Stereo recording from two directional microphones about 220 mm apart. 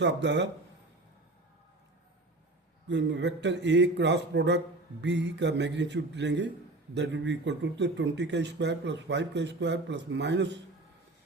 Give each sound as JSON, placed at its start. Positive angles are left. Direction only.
{"t": 0.0, "sound": "speech", "side_deg": -55}
{"t": 2.8, "sound": "speech", "side_deg": -50}